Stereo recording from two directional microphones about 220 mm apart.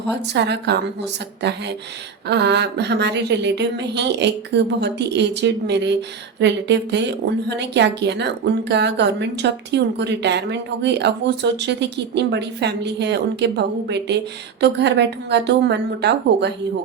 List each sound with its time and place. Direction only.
0.3 s a woman's voice: 50° right (ahead or behind)
2.2 s a woman's voice: 50° right (ahead or behind)